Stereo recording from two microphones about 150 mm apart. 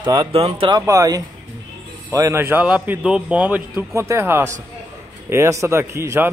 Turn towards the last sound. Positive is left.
turn(degrees=-15)  # may be behind; listen again after turning